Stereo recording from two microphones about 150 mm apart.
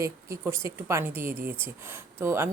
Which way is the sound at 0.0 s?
20° right (ahead or behind).